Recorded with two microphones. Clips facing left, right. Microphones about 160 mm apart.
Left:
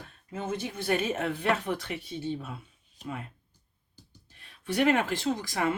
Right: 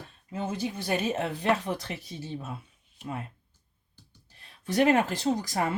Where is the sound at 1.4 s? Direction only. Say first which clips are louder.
Right 1 dB; 35° right (ahead or behind).